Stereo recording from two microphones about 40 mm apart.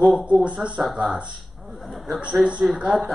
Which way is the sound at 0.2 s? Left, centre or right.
Right.